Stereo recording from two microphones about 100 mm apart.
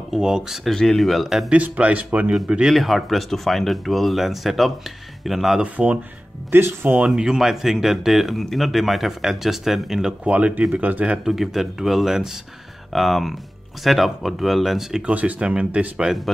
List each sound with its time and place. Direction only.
0.1 s speech: 5° right (ahead or behind)
1.5 s speech: 15° right (ahead or behind)
6.5 s speech: 20° right (ahead or behind)
6.9 s speech: 5° right (ahead or behind)
11.2 s speech: 5° right (ahead or behind)